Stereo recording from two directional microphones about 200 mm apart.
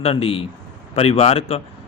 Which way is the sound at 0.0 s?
30° left (ahead or behind).